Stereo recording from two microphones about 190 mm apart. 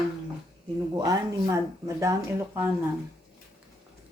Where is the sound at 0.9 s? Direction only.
20° right (ahead or behind).